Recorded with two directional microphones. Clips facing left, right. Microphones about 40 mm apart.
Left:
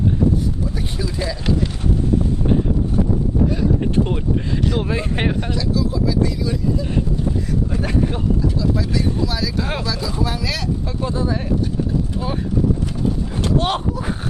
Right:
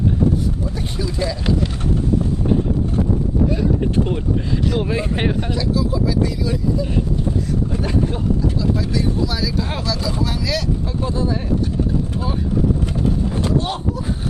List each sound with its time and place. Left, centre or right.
0.9 s speech: centre
4.7 s speech: centre
5.5 s speech: centre
7.8 s speech: centre
9.0 s speech: centre
9.6 s speech: centre
13.4 s a sound: left